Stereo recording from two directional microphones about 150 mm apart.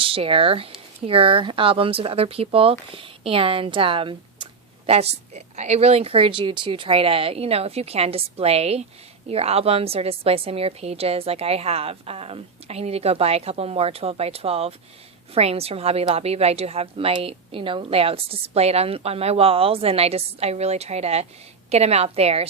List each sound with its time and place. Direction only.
0.0 s a woman's voice: 40° right (ahead or behind)